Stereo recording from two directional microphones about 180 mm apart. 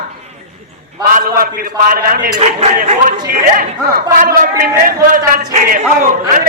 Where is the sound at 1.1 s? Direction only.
55° right (ahead or behind).